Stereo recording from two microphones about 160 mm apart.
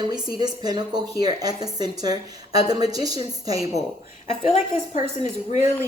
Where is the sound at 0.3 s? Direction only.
25° right (ahead or behind).